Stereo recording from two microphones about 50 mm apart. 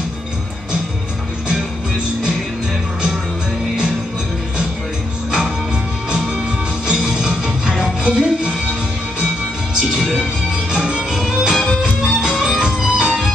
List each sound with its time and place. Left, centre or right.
6.0 s music: centre
10.7 s music: centre
11.8 s music: centre